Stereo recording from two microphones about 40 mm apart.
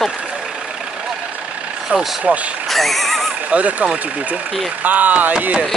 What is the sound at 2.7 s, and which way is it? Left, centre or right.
Neigh, centre.